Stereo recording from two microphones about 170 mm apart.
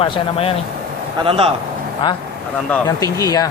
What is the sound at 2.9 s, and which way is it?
Speech, 20° left (ahead or behind).